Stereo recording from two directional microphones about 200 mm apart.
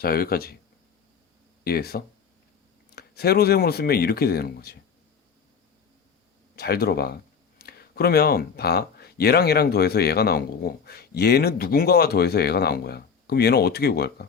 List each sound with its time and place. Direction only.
0.0 s speech: 50° left (ahead or behind)
1.6 s speech: 50° left (ahead or behind)
6.6 s speech: 50° left (ahead or behind)